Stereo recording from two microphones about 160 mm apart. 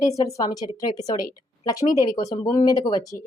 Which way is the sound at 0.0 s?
20° left (ahead or behind).